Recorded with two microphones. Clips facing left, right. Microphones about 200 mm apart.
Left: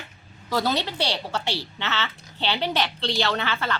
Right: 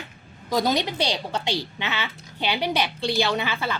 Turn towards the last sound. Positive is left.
turn(degrees=-10)  # may be behind; listen again after turning